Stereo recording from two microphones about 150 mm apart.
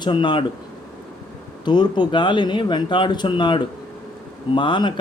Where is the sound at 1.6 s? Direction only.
30° left (ahead or behind).